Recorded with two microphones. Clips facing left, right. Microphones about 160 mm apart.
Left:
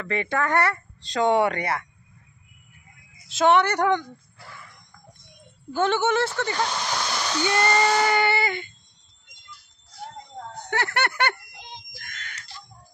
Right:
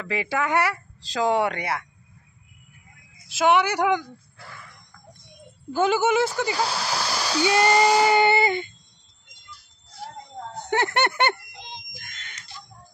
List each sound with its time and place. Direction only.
0.0 s speech: 5° right (ahead or behind)
3.3 s speech: 5° right (ahead or behind)
5.7 s speech: 10° right (ahead or behind)
10.7 s a sound: 20° right (ahead or behind)